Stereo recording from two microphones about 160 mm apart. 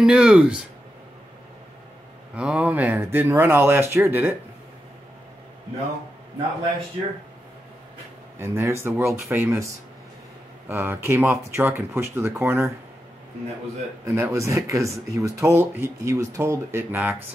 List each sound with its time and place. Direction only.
0.0 s speech: 5° right (ahead or behind)
2.3 s speech: 5° right (ahead or behind)
8.4 s speech: 15° right (ahead or behind)
10.7 s speech: 15° right (ahead or behind)
14.0 s speech: 20° right (ahead or behind)